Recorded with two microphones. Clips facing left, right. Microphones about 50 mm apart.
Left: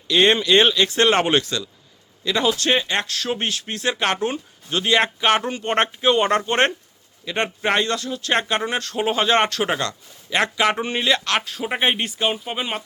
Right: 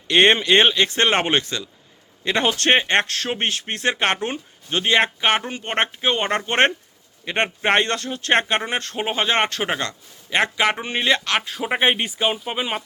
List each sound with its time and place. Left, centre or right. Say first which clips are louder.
0.3 s speech: even; right
2.2 s speech: right 1 dB; right; by 12.8 s centre